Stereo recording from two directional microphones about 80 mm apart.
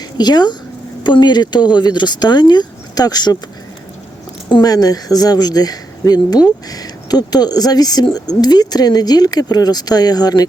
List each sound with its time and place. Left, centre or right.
0.2 s speech: left
4.6 s speech: left